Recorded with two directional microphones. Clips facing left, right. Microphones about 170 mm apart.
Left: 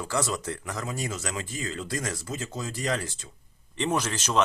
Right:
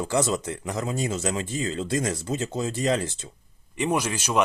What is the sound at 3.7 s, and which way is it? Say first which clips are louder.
Speech: right 2 dB; 10° right (ahead or behind).